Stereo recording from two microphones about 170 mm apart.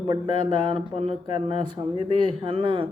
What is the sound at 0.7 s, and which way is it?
Speech, 35° right (ahead or behind).